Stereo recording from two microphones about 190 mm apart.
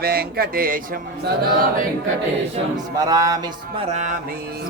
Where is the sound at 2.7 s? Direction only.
20° right (ahead or behind).